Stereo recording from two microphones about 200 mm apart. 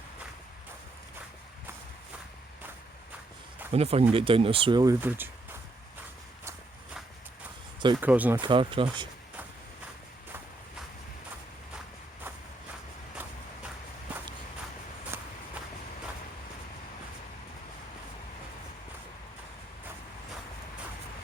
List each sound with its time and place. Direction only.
3.7 s speech: 30° right (ahead or behind); by 5.3 s 10° right (ahead or behind)
7.9 s speech: 10° right (ahead or behind)
8.4 s speech: 25° right (ahead or behind)
15.1 s walk: 10° right (ahead or behind)